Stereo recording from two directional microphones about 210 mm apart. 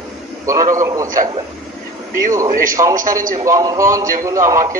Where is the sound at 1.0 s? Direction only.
40° right (ahead or behind).